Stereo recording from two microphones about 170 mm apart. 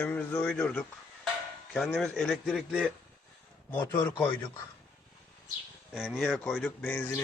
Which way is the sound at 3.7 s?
15° left (ahead or behind).